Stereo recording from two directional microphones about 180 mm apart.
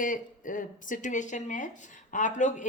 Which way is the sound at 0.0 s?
45° left (ahead or behind).